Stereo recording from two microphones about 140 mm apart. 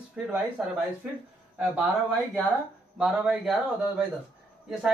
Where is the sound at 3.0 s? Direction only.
Centre (ahead or behind).